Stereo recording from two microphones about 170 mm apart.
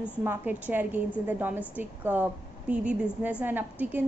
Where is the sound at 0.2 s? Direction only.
10° right (ahead or behind).